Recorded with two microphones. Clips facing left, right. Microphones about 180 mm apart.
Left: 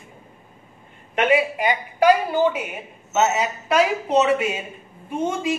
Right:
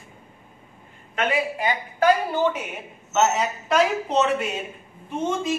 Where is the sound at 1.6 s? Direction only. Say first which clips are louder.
Left 3 dB; 15° left (ahead or behind).